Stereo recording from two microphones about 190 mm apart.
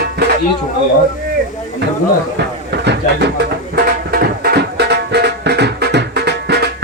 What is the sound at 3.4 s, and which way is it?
Music, 50° right (ahead or behind).